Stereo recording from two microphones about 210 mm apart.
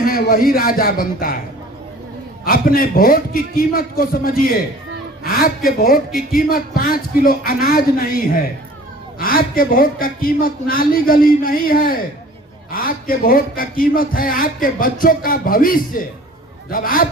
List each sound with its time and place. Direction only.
0.0 s a man's voice: 45° left (ahead or behind)
2.4 s a man's voice: 45° left (ahead or behind)